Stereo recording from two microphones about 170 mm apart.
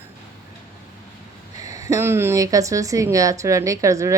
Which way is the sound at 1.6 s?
20° right (ahead or behind).